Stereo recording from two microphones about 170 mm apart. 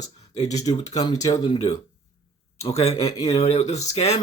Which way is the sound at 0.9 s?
20° left (ahead or behind).